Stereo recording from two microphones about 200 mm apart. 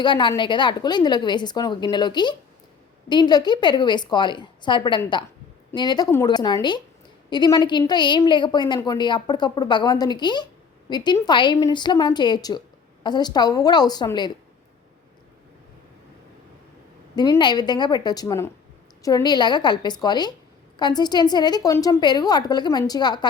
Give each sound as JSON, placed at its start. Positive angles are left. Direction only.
{"t": 0.0, "sound": "a woman's voice", "side_deg": 25}
{"t": 17.2, "sound": "a woman's voice", "side_deg": 20}